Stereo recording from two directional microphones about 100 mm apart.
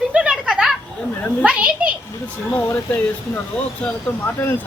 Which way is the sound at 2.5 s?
25° left (ahead or behind).